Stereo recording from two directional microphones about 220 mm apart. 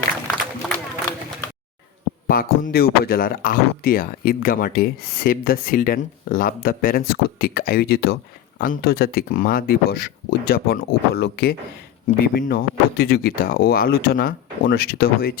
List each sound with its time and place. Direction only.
2.2 s speech: 40° left (ahead or behind)